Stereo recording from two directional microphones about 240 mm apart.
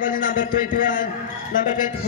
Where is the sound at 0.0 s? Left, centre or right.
Left.